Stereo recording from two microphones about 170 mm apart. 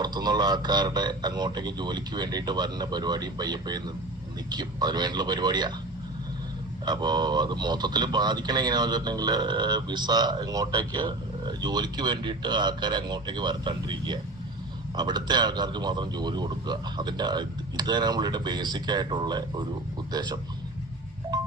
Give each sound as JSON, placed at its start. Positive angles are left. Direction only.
{"t": 0.0, "sound": "a man's voice", "side_deg": -25}
{"t": 6.8, "sound": "a man's voice", "side_deg": -25}
{"t": 21.3, "sound": "music", "side_deg": -25}